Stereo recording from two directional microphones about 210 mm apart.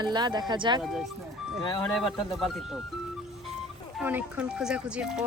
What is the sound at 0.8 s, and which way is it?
Speech, centre (ahead or behind).